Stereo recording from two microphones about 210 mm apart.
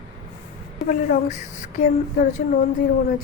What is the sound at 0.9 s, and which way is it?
Speech, 35° left (ahead or behind).